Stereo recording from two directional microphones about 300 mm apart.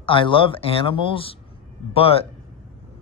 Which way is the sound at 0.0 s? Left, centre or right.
Centre.